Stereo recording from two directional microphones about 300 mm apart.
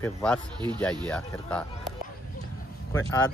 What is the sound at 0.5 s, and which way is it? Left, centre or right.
Speech, centre.